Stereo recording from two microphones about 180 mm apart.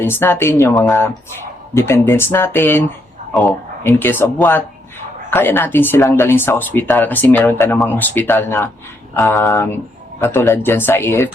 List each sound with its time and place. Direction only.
0.0 s speech: 15° left (ahead or behind)